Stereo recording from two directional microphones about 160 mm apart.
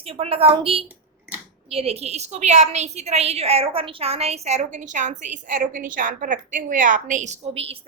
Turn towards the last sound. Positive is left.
turn(degrees=-40)  # may be behind; listen again after turning